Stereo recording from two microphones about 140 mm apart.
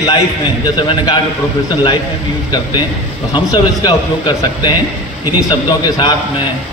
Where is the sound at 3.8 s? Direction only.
30° left (ahead or behind).